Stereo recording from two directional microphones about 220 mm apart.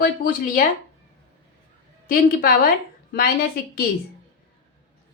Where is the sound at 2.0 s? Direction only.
40° left (ahead or behind).